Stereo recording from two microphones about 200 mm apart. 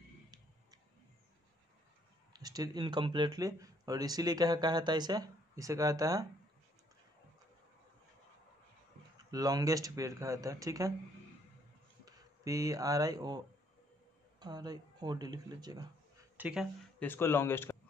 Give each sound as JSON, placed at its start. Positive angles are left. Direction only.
{"t": 2.3, "sound": "speech", "side_deg": -20}
{"t": 9.3, "sound": "speech", "side_deg": -20}
{"t": 12.0, "sound": "speech", "side_deg": -15}
{"t": 14.4, "sound": "speech", "side_deg": -20}
{"t": 16.3, "sound": "speech", "side_deg": -5}
{"t": 17.0, "sound": "speech", "side_deg": 10}